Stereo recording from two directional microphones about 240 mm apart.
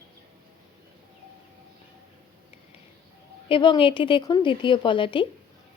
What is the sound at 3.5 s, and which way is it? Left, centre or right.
Speech, left.